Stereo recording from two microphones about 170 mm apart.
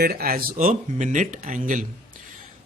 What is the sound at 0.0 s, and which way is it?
A man's voice, 60° right (ahead or behind).